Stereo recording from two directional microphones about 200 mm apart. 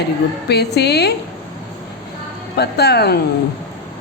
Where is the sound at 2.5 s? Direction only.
55° left (ahead or behind).